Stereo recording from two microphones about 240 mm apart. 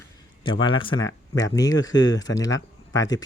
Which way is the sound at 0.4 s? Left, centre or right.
Centre.